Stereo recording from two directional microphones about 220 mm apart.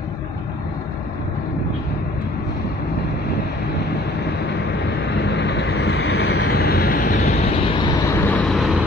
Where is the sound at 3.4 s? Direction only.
50° left (ahead or behind).